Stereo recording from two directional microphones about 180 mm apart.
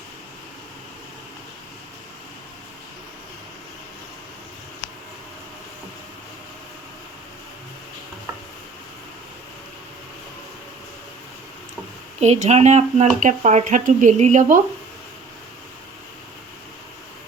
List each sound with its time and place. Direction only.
12.2 s speech: 40° right (ahead or behind)